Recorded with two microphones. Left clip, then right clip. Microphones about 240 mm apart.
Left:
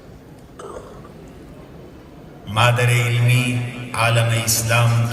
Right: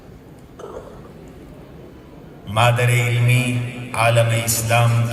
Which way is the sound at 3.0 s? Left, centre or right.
Left.